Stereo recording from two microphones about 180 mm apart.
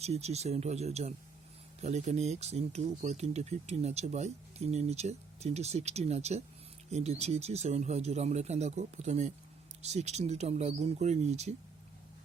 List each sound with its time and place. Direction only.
0.0 s speech: 35° right (ahead or behind)